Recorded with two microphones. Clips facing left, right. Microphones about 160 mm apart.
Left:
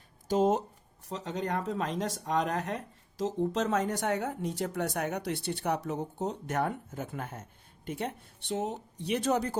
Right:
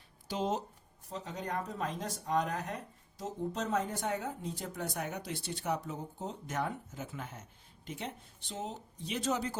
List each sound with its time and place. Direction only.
0.3 s speech: 45° left (ahead or behind)
1.1 s speech: 90° left; by 9.6 s 55° left (ahead or behind)